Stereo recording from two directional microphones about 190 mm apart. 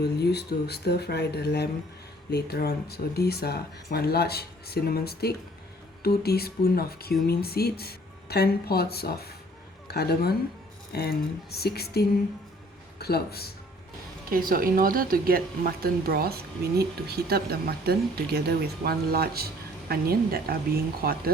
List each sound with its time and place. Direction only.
0.0 s speech: 60° left (ahead or behind)
14.3 s speech: 50° right (ahead or behind)